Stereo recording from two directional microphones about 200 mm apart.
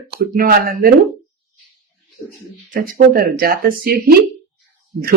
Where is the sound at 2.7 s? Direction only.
45° right (ahead or behind).